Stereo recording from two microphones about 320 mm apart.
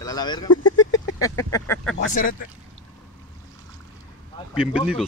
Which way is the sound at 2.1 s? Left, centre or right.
Left.